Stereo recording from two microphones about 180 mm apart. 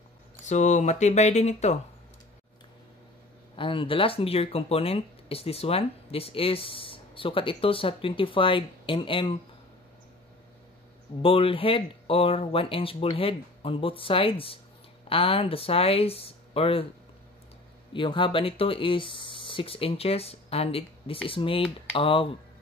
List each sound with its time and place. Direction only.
0.5 s speech: 40° left (ahead or behind)
3.5 s speech: 30° left (ahead or behind)
11.2 s speech: 30° left (ahead or behind)
17.9 s speech: 30° left (ahead or behind)